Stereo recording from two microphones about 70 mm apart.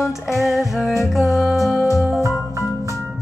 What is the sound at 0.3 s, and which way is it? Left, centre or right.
Music, centre.